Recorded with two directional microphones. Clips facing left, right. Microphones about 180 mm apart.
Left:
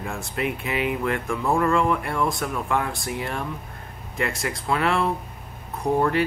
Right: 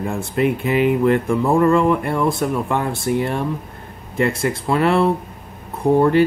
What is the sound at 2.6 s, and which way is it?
Speech, 25° right (ahead or behind).